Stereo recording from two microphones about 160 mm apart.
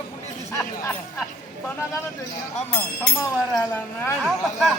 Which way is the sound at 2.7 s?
25° left (ahead or behind).